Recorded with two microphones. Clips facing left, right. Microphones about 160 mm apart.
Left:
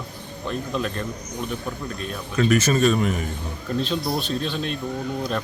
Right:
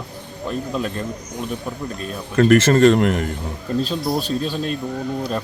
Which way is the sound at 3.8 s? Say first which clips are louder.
Right 3 dB; 40° right (ahead or behind).